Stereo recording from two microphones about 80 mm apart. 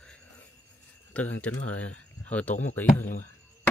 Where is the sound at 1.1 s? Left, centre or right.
Centre.